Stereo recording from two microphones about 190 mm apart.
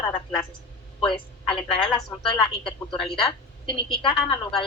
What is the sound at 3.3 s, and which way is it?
A woman's voice, 25° left (ahead or behind).